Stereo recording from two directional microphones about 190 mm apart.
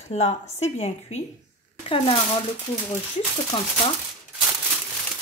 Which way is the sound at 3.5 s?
30° left (ahead or behind).